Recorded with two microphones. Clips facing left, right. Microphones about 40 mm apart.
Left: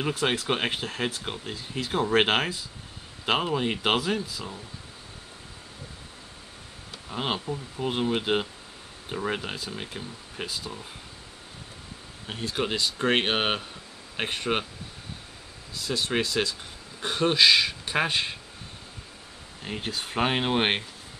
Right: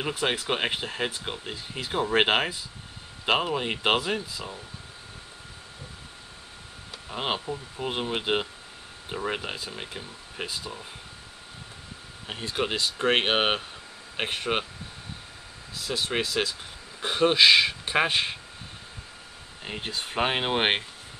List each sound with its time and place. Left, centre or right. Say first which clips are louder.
0.2 s speech: right 1 dB; centre
7.1 s speech: even; centre
12.3 s speech: even; centre
15.7 s speech: left 1 dB; centre
19.6 s speech: left 1 dB; centre